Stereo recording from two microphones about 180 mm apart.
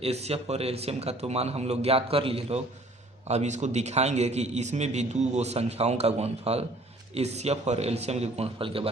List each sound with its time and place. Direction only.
0.0 s a man's voice: 35° right (ahead or behind)